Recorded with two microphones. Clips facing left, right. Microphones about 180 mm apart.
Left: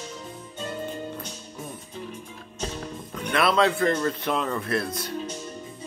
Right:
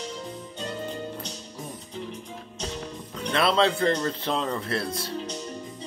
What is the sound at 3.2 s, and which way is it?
A man's voice, 30° right (ahead or behind).